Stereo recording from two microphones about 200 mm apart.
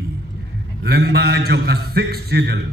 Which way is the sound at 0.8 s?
55° right (ahead or behind).